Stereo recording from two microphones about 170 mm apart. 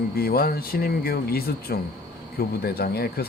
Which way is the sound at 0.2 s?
65° left (ahead or behind).